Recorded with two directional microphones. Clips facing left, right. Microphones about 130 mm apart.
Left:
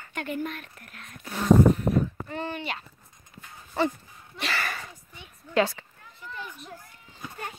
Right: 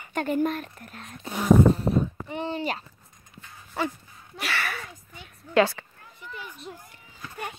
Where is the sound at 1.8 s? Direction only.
25° right (ahead or behind).